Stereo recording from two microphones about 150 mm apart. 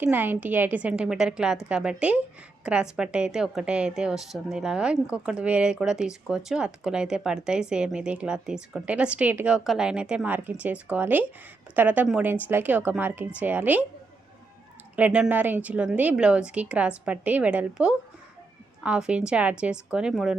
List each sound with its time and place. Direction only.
0.0 s speech: 15° right (ahead or behind)
14.9 s speech: 10° right (ahead or behind)